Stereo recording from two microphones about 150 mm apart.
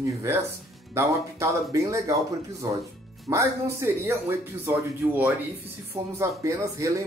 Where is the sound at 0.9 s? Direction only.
20° right (ahead or behind).